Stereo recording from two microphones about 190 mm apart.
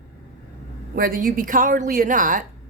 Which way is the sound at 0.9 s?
50° right (ahead or behind).